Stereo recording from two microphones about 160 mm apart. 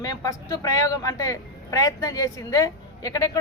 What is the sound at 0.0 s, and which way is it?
Speech, 20° left (ahead or behind).